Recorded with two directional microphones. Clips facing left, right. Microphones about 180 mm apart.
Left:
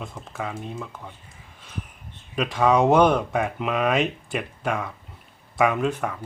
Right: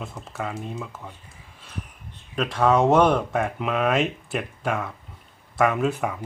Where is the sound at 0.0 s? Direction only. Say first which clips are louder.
Even; centre (ahead or behind).